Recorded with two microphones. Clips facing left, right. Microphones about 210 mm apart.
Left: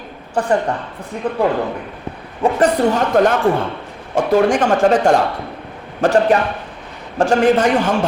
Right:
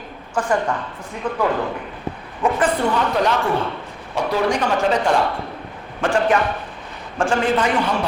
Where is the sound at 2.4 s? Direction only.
40° left (ahead or behind).